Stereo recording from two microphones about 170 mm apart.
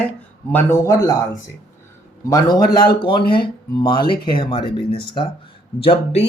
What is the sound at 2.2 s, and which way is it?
Speech, 25° left (ahead or behind).